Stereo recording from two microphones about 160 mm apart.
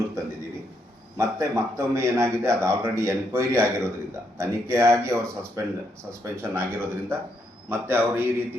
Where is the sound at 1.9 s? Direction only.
15° right (ahead or behind).